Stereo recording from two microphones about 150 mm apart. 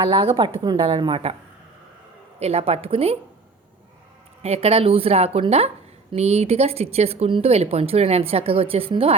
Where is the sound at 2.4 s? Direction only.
45° right (ahead or behind).